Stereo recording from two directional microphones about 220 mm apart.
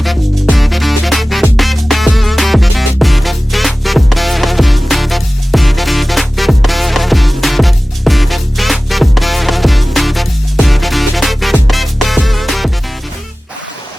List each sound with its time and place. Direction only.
0.0 s music: centre (ahead or behind)